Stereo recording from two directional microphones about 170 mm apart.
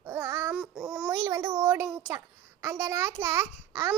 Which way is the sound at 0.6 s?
5° right (ahead or behind).